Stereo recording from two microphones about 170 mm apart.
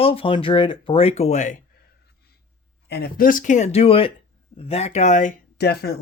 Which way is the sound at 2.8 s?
70° left (ahead or behind).